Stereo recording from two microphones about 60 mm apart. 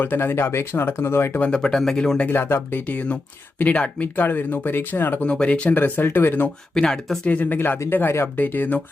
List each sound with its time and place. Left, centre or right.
0.0 s speech: left
1.4 s speech: centre
2.3 s speech: left
5.2 s speech: centre
6.7 s speech: centre
7.3 s speech: left
8.4 s speech: left